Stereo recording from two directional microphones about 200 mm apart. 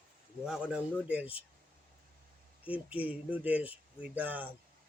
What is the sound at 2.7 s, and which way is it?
Speech, 5° right (ahead or behind).